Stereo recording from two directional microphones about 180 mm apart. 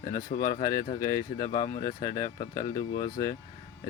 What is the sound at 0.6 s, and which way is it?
Speech, 20° left (ahead or behind).